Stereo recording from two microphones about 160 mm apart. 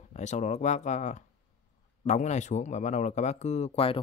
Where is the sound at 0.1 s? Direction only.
45° left (ahead or behind).